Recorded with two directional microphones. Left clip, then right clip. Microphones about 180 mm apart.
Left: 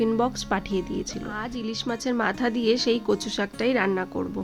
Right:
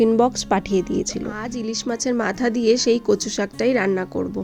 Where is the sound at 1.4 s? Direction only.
10° right (ahead or behind).